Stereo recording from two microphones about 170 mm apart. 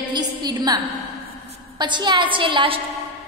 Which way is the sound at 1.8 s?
25° right (ahead or behind).